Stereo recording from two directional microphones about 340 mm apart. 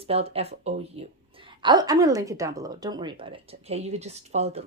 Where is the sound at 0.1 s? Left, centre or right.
Centre.